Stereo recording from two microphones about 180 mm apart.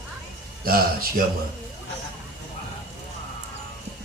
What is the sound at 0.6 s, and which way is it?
Speech, 55° right (ahead or behind).